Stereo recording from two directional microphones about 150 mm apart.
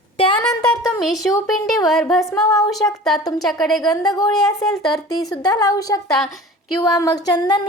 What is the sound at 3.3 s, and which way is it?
Speech, centre (ahead or behind).